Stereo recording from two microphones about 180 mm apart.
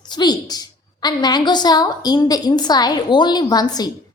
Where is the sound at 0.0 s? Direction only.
25° left (ahead or behind).